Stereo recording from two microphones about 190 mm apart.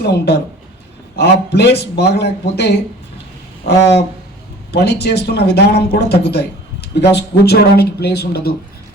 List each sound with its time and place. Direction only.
0.0 s speech: 60° left (ahead or behind)
4.7 s speech: 60° left (ahead or behind)